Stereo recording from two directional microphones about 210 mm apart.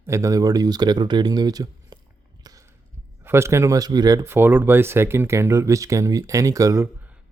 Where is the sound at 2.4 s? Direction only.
20° right (ahead or behind).